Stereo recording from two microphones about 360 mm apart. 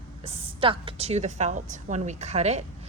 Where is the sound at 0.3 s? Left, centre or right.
Centre.